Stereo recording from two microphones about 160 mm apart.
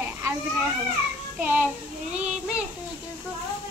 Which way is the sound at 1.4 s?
10° right (ahead or behind).